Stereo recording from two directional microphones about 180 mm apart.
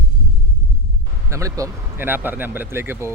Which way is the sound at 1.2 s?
15° right (ahead or behind).